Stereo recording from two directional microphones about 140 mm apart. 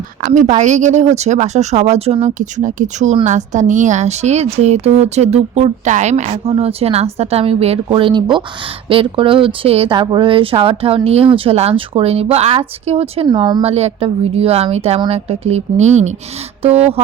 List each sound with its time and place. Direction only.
0.2 s speech: 70° right (ahead or behind); by 13.2 s 45° right (ahead or behind)
13.2 s speech: 35° right (ahead or behind)